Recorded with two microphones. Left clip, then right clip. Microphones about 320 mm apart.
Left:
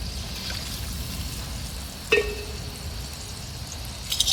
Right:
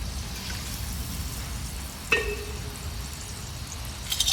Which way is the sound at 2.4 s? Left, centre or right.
Centre.